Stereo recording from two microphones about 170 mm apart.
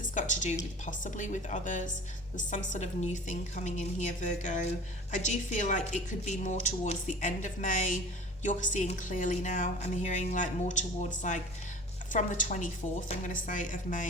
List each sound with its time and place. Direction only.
0.1 s a woman's voice: 45° left (ahead or behind)